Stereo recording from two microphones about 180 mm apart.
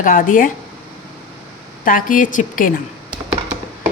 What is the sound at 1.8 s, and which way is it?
Speech, 45° left (ahead or behind).